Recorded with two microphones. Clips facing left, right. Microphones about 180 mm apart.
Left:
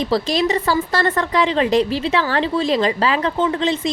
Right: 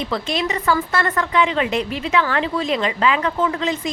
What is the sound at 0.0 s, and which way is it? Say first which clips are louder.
Speech: left 5 dB; 35° left (ahead or behind).